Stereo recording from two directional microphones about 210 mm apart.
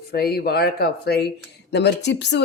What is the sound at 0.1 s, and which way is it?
Speech, 50° left (ahead or behind).